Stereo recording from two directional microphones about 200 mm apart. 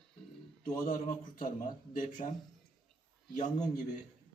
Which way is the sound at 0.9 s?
40° left (ahead or behind).